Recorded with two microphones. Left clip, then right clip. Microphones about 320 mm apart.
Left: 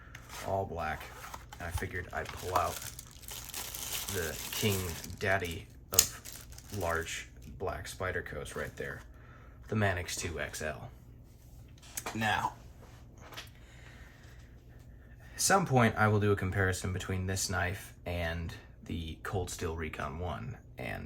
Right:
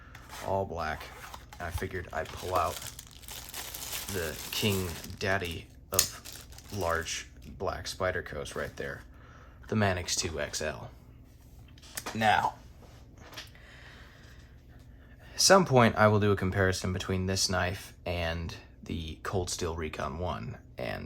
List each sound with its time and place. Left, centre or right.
0.1 s speech: centre
3.2 s crumpling: centre
5.9 s speech: centre
11.9 s speech: right
15.4 s speech: centre